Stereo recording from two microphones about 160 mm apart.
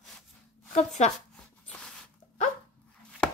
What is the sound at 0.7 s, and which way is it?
Speech, 45° left (ahead or behind).